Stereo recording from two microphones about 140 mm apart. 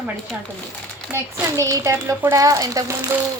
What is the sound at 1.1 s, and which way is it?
Speech, 20° right (ahead or behind).